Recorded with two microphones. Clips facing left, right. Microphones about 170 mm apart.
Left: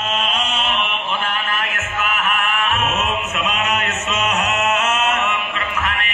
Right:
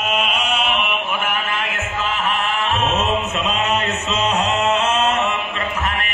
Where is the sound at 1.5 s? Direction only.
30° right (ahead or behind).